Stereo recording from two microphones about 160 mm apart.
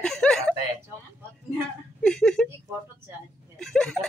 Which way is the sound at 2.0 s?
5° left (ahead or behind).